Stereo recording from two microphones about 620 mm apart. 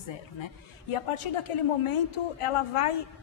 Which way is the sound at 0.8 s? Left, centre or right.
Left.